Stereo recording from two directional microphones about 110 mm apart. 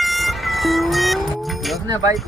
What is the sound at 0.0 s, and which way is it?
Music, centre (ahead or behind).